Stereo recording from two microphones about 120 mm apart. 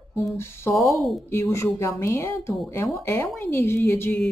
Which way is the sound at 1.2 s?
20° left (ahead or behind).